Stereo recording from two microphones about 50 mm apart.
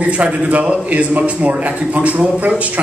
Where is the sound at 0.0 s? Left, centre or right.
Right.